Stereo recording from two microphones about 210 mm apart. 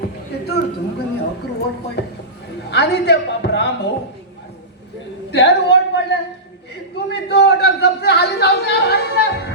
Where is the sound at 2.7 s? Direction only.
50° left (ahead or behind).